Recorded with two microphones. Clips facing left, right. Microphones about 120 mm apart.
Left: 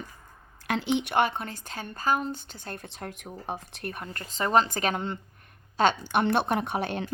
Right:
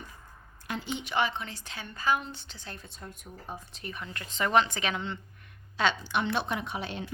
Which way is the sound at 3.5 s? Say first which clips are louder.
Left 6 dB; 70° left (ahead or behind).